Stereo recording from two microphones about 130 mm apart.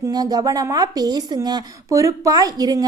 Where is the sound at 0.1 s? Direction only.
30° right (ahead or behind).